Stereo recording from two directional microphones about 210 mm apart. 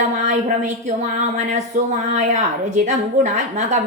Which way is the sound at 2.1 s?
35° right (ahead or behind).